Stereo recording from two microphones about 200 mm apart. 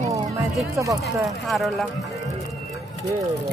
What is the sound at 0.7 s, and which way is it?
Speech, 15° right (ahead or behind).